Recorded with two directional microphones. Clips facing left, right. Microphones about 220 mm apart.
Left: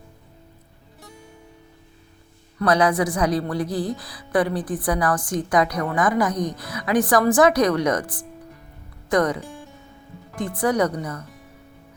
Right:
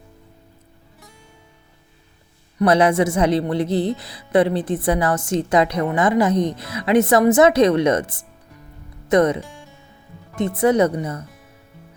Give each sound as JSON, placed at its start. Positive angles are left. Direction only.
{"t": 2.6, "sound": "speech", "side_deg": -25}